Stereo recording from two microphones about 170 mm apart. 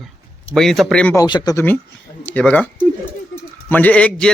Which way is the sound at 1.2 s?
25° left (ahead or behind).